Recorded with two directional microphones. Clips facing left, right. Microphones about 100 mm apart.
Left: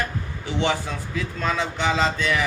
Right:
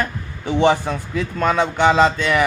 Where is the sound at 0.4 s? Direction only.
50° right (ahead or behind).